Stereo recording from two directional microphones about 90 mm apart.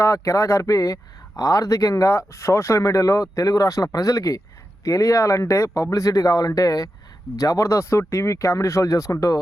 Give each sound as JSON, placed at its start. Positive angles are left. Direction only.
{"t": 0.0, "sound": "speech", "side_deg": 35}